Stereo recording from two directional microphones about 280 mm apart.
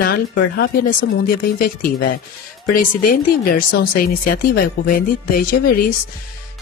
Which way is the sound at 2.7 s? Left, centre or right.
Left.